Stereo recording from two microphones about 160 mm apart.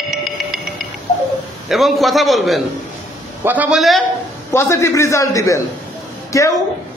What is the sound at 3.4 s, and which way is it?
Speech, 10° right (ahead or behind).